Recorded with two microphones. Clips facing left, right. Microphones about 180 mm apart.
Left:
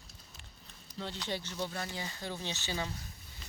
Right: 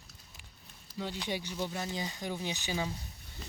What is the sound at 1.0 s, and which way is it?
Speech, 10° right (ahead or behind).